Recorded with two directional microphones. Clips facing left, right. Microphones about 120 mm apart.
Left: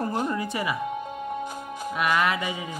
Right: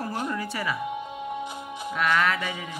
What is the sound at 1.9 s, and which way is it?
Music, 15° left (ahead or behind).